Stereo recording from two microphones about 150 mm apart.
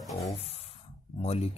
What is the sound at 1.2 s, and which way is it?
Speech, 45° left (ahead or behind).